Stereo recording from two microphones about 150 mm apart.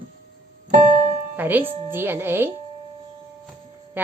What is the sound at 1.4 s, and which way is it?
A woman's voice, 15° right (ahead or behind).